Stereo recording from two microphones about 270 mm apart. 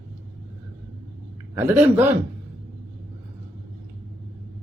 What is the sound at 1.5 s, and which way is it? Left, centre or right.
Speech, centre.